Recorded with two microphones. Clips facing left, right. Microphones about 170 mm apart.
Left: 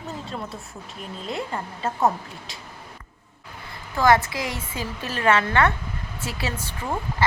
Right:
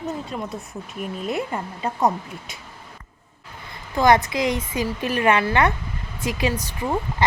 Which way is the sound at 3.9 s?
20° right (ahead or behind).